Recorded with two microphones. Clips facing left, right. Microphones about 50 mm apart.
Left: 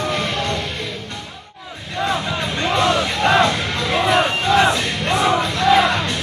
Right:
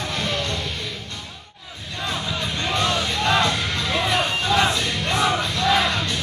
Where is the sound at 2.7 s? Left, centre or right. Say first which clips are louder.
Left 5 dB; left.